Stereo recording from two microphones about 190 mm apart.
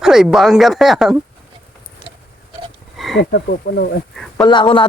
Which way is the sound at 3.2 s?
60° left (ahead or behind).